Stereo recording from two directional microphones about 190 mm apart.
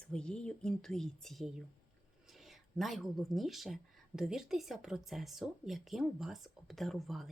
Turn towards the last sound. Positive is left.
turn(degrees=0)  # may be behind; listen again after turning